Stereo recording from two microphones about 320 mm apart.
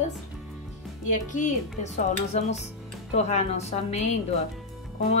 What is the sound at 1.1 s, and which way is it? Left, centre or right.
Speech, left.